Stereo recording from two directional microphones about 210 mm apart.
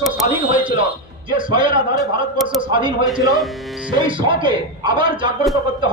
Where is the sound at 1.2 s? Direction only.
20° right (ahead or behind).